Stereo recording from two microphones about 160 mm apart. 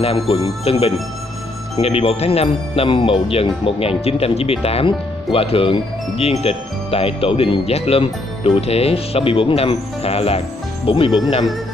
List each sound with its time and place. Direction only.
0.0 s speech: 35° left (ahead or behind)